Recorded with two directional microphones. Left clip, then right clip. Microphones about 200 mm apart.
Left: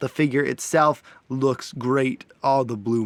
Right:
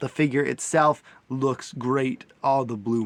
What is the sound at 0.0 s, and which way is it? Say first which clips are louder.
Speech: left 2 dB; 25° left (ahead or behind).